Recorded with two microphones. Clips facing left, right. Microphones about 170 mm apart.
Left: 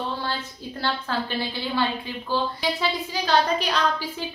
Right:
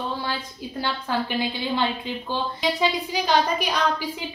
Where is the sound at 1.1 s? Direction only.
15° right (ahead or behind).